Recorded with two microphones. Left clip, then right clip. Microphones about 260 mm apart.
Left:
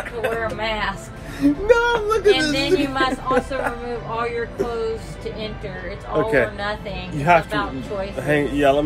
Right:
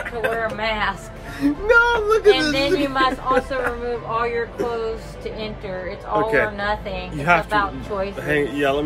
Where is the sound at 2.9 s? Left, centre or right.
Centre.